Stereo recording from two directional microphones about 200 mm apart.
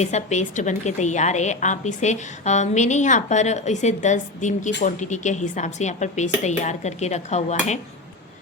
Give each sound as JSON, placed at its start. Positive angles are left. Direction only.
{"t": 0.0, "sound": "a woman's voice", "side_deg": 35}